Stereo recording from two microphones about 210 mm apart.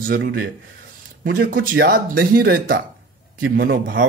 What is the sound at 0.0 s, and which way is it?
A man's voice, 45° right (ahead or behind).